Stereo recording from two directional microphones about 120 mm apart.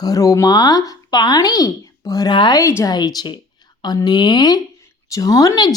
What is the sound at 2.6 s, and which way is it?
A woman's voice, 25° left (ahead or behind).